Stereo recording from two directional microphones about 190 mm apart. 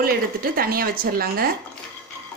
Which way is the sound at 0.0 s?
50° right (ahead or behind).